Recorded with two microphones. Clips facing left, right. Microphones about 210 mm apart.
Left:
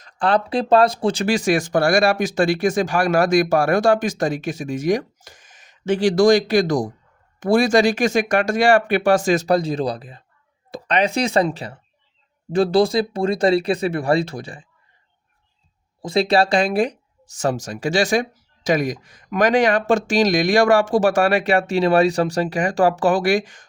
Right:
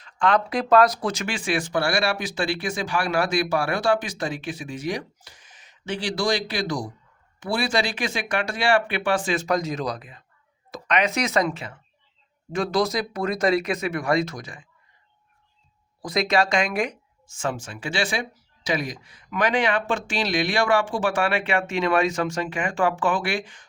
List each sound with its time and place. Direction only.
0.0 s speech: 35° left (ahead or behind)
16.0 s speech: 30° left (ahead or behind)